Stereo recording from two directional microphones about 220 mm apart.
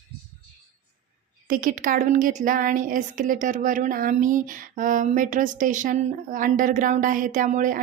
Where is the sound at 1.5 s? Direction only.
40° right (ahead or behind).